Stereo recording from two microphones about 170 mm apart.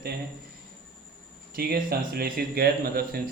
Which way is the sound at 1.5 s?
65° right (ahead or behind).